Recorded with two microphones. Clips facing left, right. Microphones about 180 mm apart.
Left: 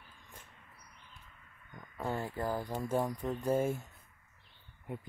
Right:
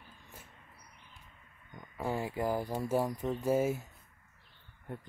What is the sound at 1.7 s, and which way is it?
Speech, 15° right (ahead or behind).